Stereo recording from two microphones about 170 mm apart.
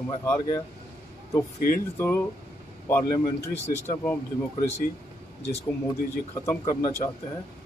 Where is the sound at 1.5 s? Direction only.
55° left (ahead or behind).